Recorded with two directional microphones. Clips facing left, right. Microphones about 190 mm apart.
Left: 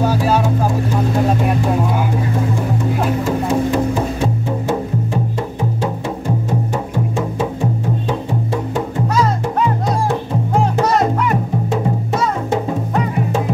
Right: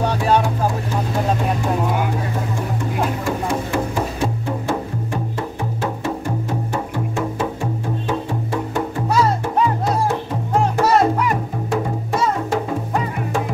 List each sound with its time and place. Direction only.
0.0 s music: 5° left (ahead or behind)
3.4 s music: 20° left (ahead or behind)
6.7 s music: 15° left (ahead or behind)
10.8 s music: 5° right (ahead or behind)